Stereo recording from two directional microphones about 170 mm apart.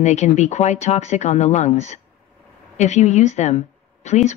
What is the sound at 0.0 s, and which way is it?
Speech, 45° left (ahead or behind).